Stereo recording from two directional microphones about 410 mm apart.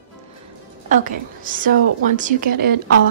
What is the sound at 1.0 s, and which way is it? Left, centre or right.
Speech, centre.